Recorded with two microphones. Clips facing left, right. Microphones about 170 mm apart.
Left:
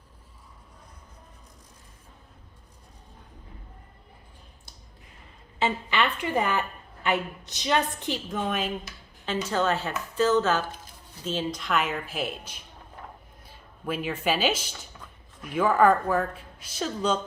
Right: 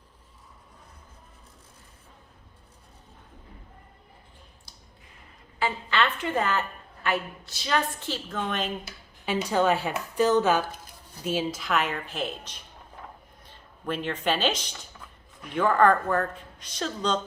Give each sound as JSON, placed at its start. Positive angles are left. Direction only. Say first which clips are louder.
{"t": 5.5, "sound": "a woman's voice", "louder": "left 1 dB", "side_deg": 20}
{"t": 9.2, "sound": "a woman's voice", "louder": "right 2 dB", "side_deg": -15}